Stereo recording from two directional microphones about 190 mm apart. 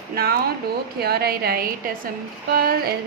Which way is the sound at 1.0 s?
55° right (ahead or behind).